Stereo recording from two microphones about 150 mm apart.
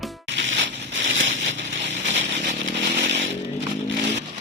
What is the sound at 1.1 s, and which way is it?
Chainsaw, 50° right (ahead or behind).